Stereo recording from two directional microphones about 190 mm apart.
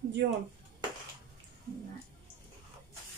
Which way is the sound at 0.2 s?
55° right (ahead or behind).